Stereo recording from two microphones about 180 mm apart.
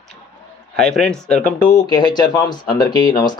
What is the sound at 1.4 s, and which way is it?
Speech, 45° left (ahead or behind).